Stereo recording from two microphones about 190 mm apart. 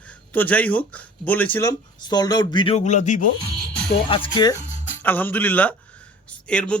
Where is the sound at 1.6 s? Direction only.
20° left (ahead or behind); by 3.2 s 40° left (ahead or behind).